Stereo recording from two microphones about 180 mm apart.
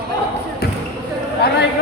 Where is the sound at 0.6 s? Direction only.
60° left (ahead or behind).